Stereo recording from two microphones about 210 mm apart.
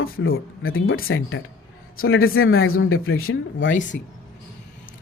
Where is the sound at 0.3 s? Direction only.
75° left (ahead or behind).